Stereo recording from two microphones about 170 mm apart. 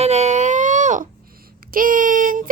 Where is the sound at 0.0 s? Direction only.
40° right (ahead or behind).